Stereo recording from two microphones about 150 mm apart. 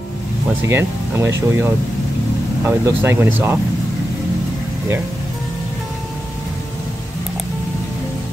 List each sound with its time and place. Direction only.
0.7 s speech: 15° right (ahead or behind)